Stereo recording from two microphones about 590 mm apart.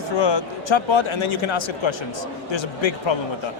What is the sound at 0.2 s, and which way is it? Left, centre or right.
A man's voice, left.